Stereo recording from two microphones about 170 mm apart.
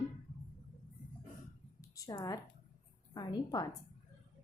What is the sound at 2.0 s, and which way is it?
A woman's voice, 20° left (ahead or behind).